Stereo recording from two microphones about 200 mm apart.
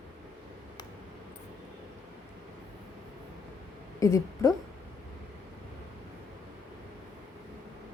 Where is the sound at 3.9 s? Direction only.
15° left (ahead or behind).